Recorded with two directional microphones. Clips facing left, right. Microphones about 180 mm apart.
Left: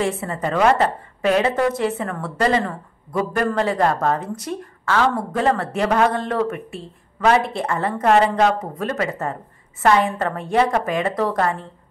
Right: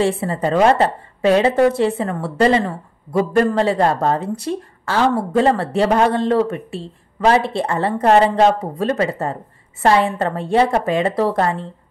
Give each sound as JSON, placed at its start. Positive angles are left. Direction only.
{"t": 0.0, "sound": "speech", "side_deg": -30}